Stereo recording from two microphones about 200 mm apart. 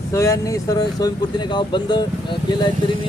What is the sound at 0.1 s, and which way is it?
Speech, 15° left (ahead or behind).